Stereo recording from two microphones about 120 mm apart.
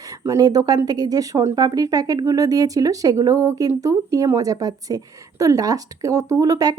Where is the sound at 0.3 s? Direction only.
30° right (ahead or behind).